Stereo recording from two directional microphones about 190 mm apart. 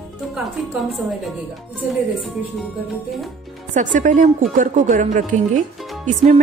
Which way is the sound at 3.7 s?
40° right (ahead or behind).